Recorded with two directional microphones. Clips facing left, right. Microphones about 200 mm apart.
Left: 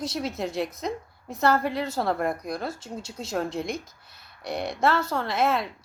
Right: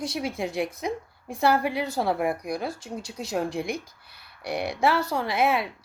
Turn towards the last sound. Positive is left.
turn(degrees=-5)  # may be behind; listen again after turning